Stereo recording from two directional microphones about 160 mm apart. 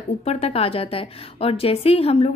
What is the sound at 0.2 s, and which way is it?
A woman's voice, 40° left (ahead or behind).